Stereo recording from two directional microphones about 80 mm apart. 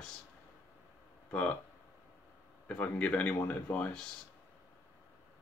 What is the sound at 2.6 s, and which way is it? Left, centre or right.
Speech, centre.